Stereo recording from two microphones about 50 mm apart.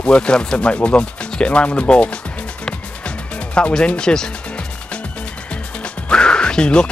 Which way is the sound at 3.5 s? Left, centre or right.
Left.